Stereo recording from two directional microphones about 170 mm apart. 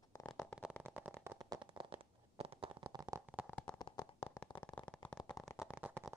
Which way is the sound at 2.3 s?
35° right (ahead or behind).